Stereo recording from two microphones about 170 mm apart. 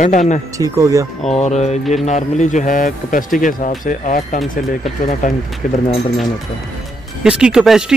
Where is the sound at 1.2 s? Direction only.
40° left (ahead or behind).